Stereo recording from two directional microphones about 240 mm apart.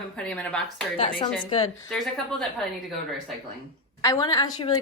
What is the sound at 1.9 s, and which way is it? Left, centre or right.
Speech, centre.